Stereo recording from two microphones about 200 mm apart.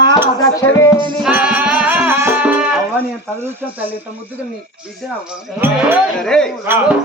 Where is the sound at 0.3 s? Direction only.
15° left (ahead or behind).